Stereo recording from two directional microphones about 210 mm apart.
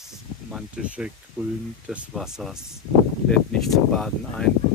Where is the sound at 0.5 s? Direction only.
5° right (ahead or behind).